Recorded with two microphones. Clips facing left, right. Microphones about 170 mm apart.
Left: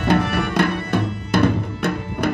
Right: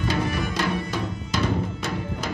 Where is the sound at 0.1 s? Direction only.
65° left (ahead or behind).